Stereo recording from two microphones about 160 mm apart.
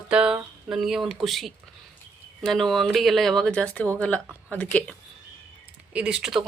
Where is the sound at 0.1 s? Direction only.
5° right (ahead or behind).